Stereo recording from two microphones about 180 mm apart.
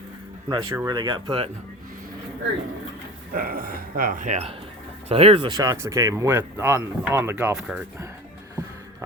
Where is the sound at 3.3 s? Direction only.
55° right (ahead or behind); by 5.5 s 30° right (ahead or behind).